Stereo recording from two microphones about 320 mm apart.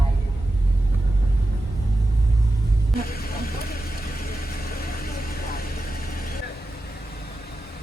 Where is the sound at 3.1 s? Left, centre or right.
Left.